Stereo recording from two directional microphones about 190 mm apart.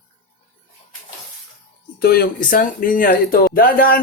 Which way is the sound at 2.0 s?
55° left (ahead or behind).